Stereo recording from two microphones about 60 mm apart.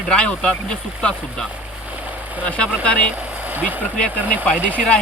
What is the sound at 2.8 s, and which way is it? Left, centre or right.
Speech, centre.